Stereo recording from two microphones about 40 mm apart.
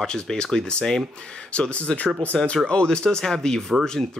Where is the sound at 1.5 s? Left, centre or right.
Left.